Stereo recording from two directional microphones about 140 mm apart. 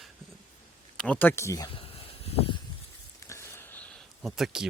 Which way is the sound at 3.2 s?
20° left (ahead or behind).